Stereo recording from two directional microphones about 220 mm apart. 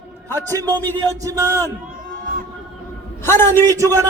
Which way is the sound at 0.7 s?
10° left (ahead or behind).